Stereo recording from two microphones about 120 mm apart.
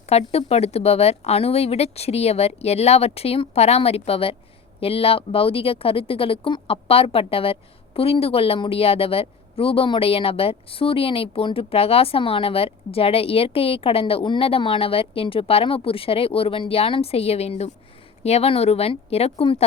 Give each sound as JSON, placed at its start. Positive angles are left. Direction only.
{"t": 0.1, "sound": "speech", "side_deg": 60}